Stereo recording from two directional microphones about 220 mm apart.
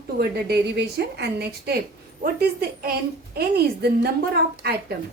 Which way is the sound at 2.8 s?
45° right (ahead or behind).